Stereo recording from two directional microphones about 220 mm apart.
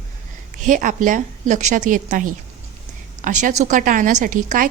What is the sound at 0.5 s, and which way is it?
A woman's voice, 35° right (ahead or behind).